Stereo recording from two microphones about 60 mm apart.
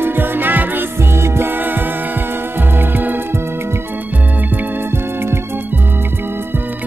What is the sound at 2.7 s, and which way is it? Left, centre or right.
Music, right.